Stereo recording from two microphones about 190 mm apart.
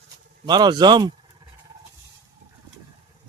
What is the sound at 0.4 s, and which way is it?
Speech, 20° right (ahead or behind).